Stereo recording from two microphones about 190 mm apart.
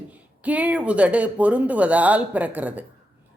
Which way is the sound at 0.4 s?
5° right (ahead or behind).